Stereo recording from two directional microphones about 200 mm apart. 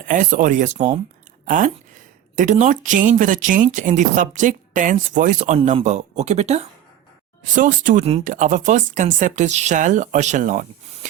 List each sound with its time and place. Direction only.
0.1 s speech: 40° right (ahead or behind)